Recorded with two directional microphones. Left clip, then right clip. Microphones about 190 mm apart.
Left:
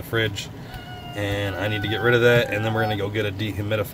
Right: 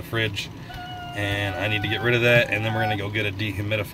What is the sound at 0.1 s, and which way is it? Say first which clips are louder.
Speech: left 2 dB; 5° left (ahead or behind).